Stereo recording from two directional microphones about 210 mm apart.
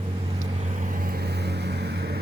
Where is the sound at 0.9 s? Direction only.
45° right (ahead or behind).